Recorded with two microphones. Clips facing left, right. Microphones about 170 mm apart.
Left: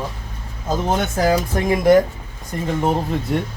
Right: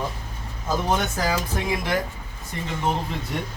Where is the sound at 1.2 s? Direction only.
45° left (ahead or behind).